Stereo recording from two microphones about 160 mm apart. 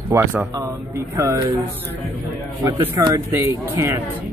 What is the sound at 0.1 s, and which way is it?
Speech, 15° right (ahead or behind).